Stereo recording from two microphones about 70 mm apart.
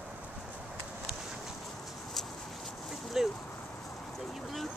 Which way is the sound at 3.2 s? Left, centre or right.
Centre.